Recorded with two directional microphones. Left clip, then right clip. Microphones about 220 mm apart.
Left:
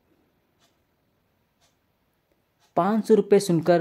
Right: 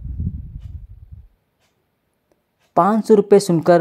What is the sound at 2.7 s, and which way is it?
Speech, 20° right (ahead or behind).